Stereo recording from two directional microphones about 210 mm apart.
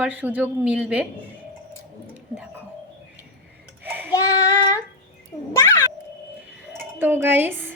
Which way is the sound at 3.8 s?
10° right (ahead or behind).